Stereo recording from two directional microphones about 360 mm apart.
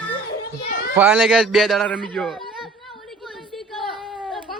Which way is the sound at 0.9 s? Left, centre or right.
Centre.